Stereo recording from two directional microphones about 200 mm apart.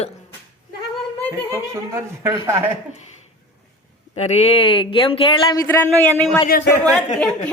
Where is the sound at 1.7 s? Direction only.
15° right (ahead or behind).